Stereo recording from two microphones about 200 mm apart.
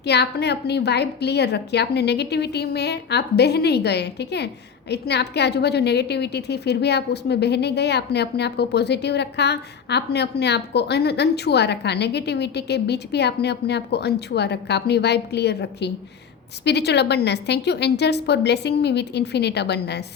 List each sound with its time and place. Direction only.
0.0 s a woman's voice: 55° left (ahead or behind)